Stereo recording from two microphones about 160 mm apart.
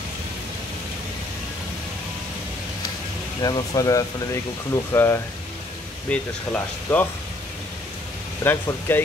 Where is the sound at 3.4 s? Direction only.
25° left (ahead or behind).